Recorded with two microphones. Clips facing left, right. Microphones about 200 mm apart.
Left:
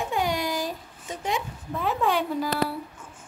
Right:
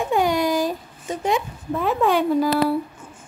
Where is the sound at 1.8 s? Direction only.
55° right (ahead or behind).